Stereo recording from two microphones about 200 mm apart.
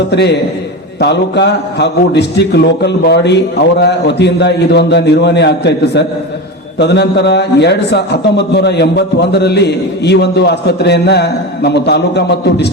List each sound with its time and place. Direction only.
0.1 s a man's voice: 55° left (ahead or behind)